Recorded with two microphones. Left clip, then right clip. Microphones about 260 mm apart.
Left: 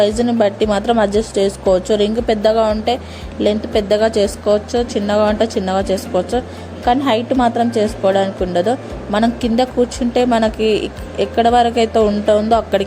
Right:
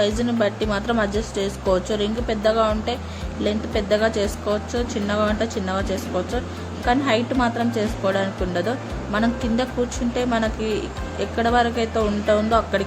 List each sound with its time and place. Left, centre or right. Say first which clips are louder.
0.0 s speech: left 7 dB; left